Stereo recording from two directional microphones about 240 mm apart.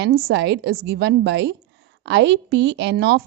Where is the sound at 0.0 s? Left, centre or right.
Right.